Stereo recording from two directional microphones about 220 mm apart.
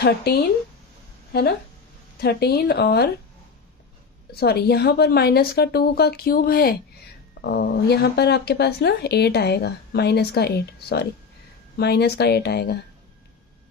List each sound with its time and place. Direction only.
0.0 s speech: 45° left (ahead or behind)
2.1 s speech: 45° left (ahead or behind)
4.3 s speech: 45° left (ahead or behind)